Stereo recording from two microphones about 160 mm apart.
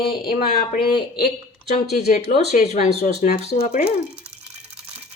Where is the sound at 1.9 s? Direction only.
70° left (ahead or behind).